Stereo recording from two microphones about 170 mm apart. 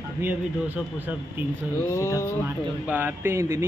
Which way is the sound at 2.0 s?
15° left (ahead or behind).